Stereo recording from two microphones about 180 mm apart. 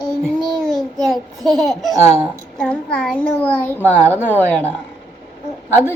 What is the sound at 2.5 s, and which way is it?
A child's voice, 5° left (ahead or behind).